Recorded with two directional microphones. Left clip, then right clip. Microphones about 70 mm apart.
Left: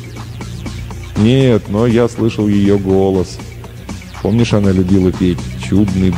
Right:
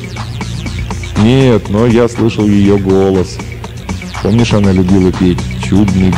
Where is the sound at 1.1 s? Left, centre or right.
Left.